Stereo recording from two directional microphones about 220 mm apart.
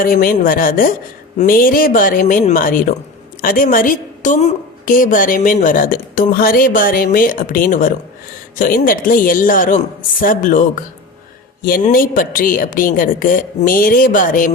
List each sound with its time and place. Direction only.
0.0 s a woman's voice: 40° left (ahead or behind)